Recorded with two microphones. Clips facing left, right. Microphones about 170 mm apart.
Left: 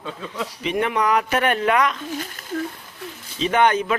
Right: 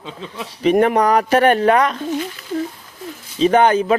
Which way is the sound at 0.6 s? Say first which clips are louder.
Right 8 dB; 45° right (ahead or behind).